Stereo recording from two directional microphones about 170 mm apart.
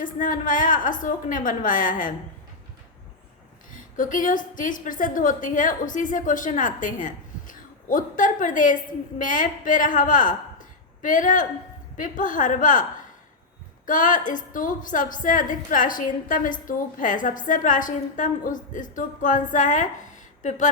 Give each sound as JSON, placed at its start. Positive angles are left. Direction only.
{"t": 0.0, "sound": "a woman's voice", "side_deg": 50}
{"t": 3.7, "sound": "a woman's voice", "side_deg": 50}